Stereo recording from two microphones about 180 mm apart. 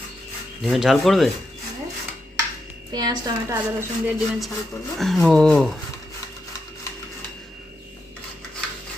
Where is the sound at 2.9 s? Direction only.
20° right (ahead or behind).